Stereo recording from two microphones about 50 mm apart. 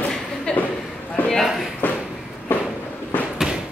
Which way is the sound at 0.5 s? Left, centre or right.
Centre.